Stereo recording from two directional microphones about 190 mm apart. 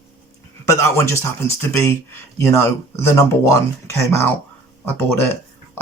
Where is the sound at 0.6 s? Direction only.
15° left (ahead or behind).